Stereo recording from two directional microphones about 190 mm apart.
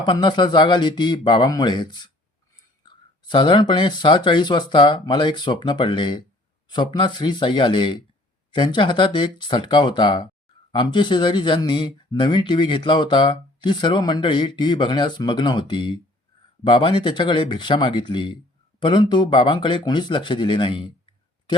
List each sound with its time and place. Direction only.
0.0 s speech: 25° left (ahead or behind)